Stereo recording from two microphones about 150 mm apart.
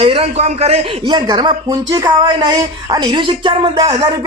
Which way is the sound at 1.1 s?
30° right (ahead or behind).